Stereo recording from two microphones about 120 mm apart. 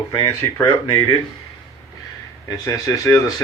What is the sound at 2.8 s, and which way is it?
Speech, 30° left (ahead or behind).